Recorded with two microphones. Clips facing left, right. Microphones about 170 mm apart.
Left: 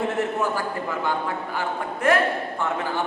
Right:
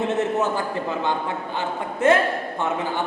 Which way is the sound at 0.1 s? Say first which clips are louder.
Right 2 dB; 20° right (ahead or behind).